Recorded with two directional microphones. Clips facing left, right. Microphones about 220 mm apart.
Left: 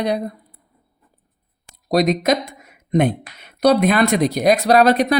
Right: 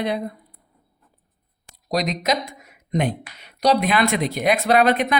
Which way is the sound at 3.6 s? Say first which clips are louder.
Left 4 dB; 45° left (ahead or behind).